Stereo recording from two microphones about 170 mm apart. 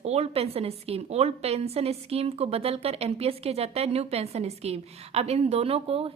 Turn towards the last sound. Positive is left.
turn(degrees=-35)  # may be behind; listen again after turning